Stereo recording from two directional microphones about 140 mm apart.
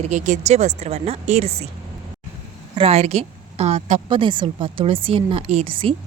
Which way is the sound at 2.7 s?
45° right (ahead or behind).